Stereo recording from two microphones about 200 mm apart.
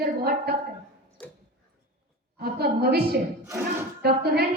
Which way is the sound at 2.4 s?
50° right (ahead or behind).